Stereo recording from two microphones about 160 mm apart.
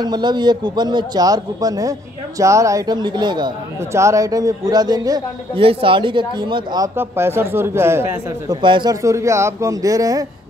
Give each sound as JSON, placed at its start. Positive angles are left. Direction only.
{"t": 0.0, "sound": "a man's voice", "side_deg": -25}
{"t": 5.6, "sound": "speech", "side_deg": -35}
{"t": 7.0, "sound": "speech", "side_deg": -15}
{"t": 8.5, "sound": "a man's voice", "side_deg": -30}
{"t": 9.0, "sound": "a man's voice", "side_deg": -20}